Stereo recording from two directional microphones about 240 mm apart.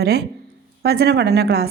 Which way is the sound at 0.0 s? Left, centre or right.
Right.